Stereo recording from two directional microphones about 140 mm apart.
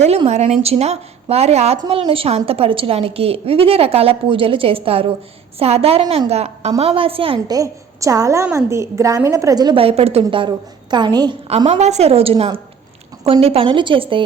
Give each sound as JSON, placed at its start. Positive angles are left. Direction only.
{"t": 0.3, "sound": "a woman's voice", "side_deg": -50}
{"t": 7.5, "sound": "a woman's voice", "side_deg": -25}
{"t": 9.7, "sound": "a woman's voice", "side_deg": -45}
{"t": 10.9, "sound": "a woman's voice", "side_deg": -30}
{"t": 11.8, "sound": "a woman's voice", "side_deg": -50}